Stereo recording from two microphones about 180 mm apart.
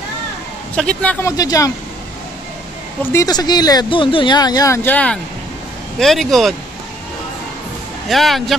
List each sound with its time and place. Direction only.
0.7 s speech: 5° left (ahead or behind)
1.2 s speech: 20° left (ahead or behind)
3.1 s speech: 20° left (ahead or behind); by 6.5 s centre (ahead or behind)
8.1 s speech: centre (ahead or behind)